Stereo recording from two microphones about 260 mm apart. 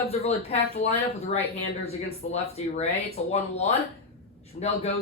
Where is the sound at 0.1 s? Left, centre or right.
Left.